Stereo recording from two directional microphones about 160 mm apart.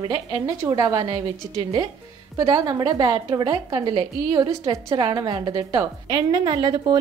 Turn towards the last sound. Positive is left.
turn(degrees=-25)  # may be behind; listen again after turning